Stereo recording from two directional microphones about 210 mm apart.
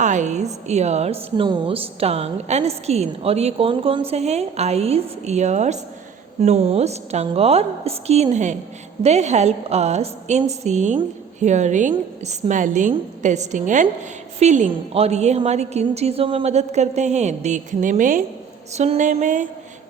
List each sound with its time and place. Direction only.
0.0 s a woman's voice: 35° right (ahead or behind)